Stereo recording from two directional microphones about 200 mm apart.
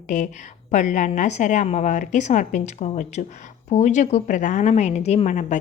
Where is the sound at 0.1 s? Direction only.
40° left (ahead or behind).